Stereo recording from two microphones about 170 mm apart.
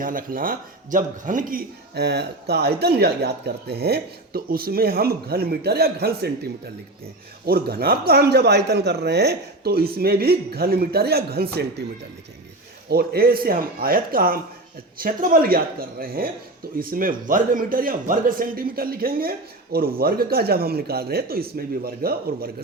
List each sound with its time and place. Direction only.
0.0 s speech: 55° right (ahead or behind); by 6.3 s 70° right (ahead or behind)
7.4 s speech: 65° right (ahead or behind)
12.9 s speech: 65° right (ahead or behind)